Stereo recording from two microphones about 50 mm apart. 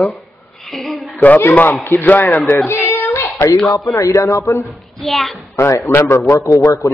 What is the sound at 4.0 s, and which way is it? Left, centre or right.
Speech, left.